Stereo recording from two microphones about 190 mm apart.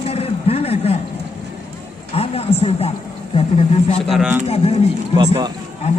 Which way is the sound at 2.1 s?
30° left (ahead or behind).